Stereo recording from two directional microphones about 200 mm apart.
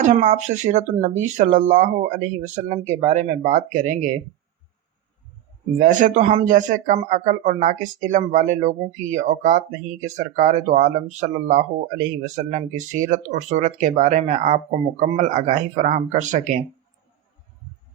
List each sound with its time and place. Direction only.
0.0 s speech: 35° right (ahead or behind)
5.8 s speech: 40° right (ahead or behind)